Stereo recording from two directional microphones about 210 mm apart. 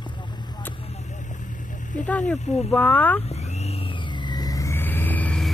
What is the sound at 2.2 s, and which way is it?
Speech, 35° left (ahead or behind).